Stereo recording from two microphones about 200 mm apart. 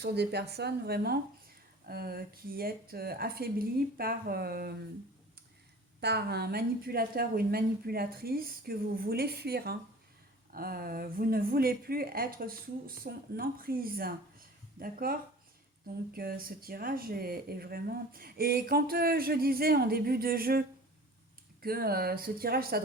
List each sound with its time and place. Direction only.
0.0 s speech: 55° right (ahead or behind)
6.0 s speech: 55° right (ahead or behind)